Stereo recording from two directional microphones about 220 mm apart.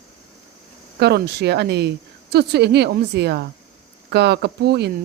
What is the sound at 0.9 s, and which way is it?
A woman's voice, 50° right (ahead or behind).